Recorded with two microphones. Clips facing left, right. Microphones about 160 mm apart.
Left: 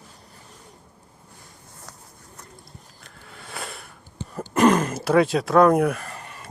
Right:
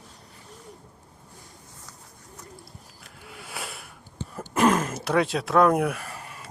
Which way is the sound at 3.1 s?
10° right (ahead or behind).